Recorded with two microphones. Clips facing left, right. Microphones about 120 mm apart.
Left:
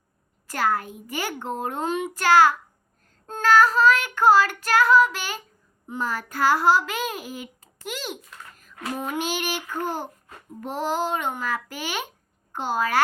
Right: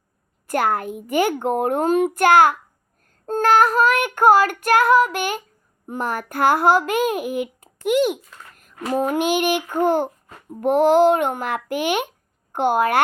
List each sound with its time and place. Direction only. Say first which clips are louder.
0.4 s a child's voice: right 4 dB; 55° right (ahead or behind)